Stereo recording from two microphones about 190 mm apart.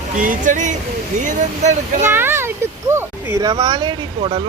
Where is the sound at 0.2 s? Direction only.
45° right (ahead or behind).